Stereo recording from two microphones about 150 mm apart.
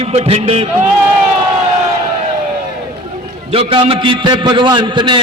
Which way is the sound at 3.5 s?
35° right (ahead or behind).